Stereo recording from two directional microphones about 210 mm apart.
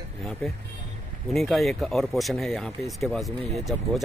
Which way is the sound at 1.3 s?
Centre (ahead or behind).